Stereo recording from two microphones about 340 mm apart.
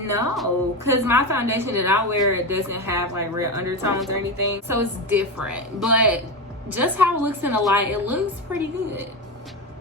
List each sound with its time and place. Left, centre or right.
0.1 s a woman's voice: centre